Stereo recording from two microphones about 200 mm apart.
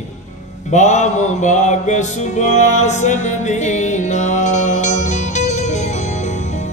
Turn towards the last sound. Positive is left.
turn(degrees=35)  # may be behind; listen again after turning